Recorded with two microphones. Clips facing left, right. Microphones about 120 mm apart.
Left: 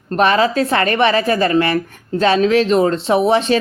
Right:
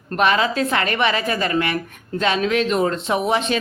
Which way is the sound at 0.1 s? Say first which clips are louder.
Left 4 dB; 35° left (ahead or behind).